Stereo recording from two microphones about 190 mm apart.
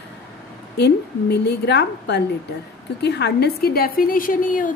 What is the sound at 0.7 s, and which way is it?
A woman's voice, 60° left (ahead or behind).